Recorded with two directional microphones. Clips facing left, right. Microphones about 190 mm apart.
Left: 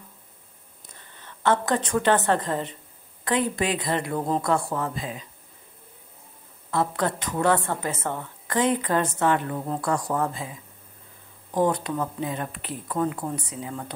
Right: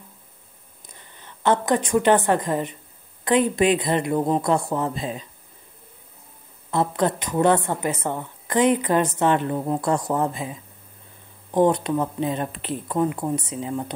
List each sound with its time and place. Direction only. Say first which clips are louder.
0.8 s a woman's voice: right 1 dB; 15° right (ahead or behind)
6.7 s a woman's voice: right 3 dB; 20° right (ahead or behind)